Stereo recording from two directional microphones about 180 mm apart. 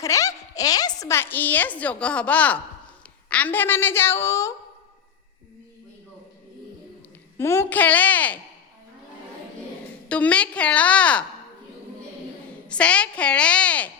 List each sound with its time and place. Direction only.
0.0 s a woman's voice: 20° left (ahead or behind)
7.3 s a woman's voice: 15° left (ahead or behind)
10.1 s a woman's voice: 5° left (ahead or behind)
12.6 s a woman's voice: 5° left (ahead or behind)